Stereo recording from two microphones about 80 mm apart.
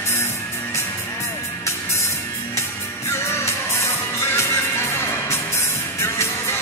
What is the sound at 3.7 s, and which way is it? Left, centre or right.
Music, left.